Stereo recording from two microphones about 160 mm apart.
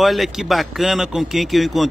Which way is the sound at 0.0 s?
Centre (ahead or behind).